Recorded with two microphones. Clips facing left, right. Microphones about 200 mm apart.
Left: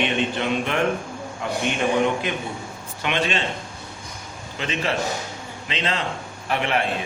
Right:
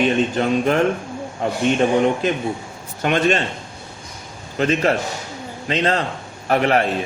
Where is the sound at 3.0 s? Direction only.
45° right (ahead or behind).